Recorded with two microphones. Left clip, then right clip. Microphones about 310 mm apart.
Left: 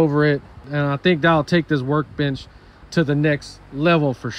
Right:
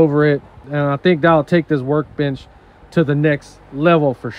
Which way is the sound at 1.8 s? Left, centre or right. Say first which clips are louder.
Right 3 dB; right.